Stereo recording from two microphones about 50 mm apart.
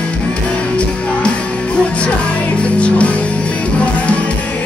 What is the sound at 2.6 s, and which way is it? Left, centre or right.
Music, left.